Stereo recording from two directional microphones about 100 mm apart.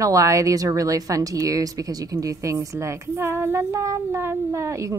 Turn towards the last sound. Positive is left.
turn(degrees=-30)  # may be behind; listen again after turning